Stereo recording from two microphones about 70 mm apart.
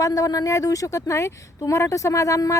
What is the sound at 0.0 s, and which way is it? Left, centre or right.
Speech, left.